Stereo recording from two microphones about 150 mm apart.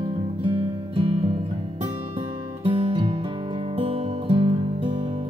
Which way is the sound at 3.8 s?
40° right (ahead or behind).